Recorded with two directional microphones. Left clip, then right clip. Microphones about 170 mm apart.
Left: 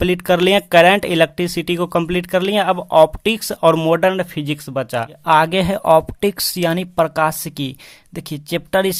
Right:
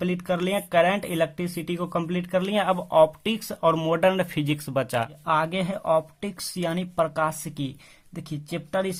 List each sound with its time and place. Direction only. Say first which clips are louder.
0.0 s speech: left 12 dB; 40° left (ahead or behind); by 5.0 s 20° left (ahead or behind)
5.2 s speech: left 13 dB; 35° left (ahead or behind)